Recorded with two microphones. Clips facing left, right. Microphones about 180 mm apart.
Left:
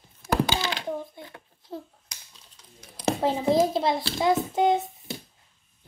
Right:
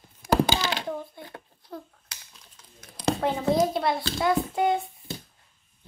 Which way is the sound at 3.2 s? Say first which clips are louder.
Left 2 dB; 25° left (ahead or behind).